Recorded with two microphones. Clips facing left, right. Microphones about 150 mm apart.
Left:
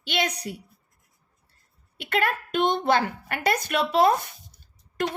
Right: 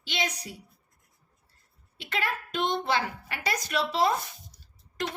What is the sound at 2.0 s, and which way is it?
A woman's voice, 55° left (ahead or behind).